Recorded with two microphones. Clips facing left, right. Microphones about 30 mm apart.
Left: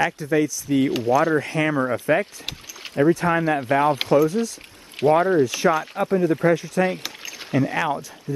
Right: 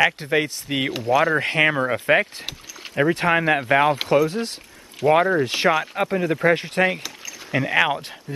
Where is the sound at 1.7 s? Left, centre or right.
Right.